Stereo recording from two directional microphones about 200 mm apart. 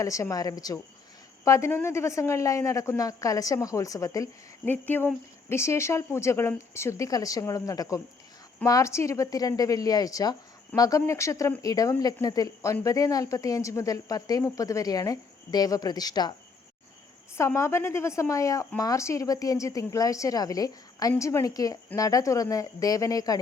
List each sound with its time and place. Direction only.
0.0 s speech: 15° left (ahead or behind)
17.3 s speech: 15° left (ahead or behind)